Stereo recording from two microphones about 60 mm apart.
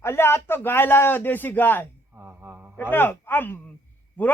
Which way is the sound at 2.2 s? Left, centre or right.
Right.